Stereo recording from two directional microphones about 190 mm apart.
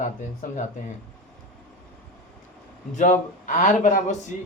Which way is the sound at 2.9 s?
40° left (ahead or behind).